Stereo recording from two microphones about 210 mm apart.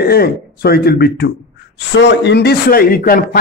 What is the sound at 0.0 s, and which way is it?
Speech, 50° left (ahead or behind).